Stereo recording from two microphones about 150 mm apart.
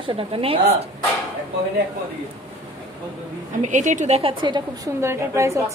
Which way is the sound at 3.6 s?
55° right (ahead or behind).